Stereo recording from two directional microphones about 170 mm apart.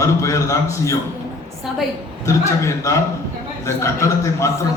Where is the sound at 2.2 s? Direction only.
20° left (ahead or behind).